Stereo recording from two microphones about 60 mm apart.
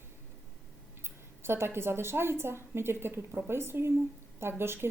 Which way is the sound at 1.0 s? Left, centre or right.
Right.